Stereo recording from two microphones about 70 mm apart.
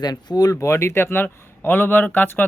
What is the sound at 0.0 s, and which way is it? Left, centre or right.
Speech, left.